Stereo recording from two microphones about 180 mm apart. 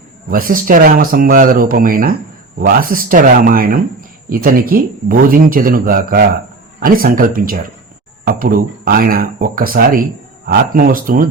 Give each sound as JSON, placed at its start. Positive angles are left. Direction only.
{"t": 0.3, "sound": "speech", "side_deg": -50}